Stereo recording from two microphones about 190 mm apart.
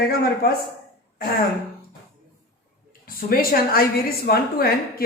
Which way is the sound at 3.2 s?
50° left (ahead or behind).